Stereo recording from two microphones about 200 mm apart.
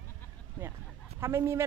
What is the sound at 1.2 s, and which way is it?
Speech, 10° right (ahead or behind).